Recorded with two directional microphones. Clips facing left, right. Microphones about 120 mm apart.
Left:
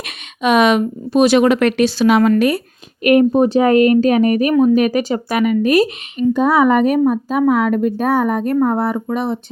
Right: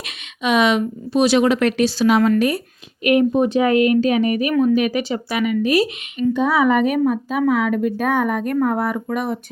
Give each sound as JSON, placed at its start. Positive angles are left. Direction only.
{"t": 0.0, "sound": "speech", "side_deg": 50}
{"t": 3.0, "sound": "a woman's voice", "side_deg": 50}